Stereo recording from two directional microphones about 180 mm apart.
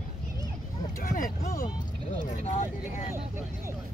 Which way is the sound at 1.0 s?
50° left (ahead or behind).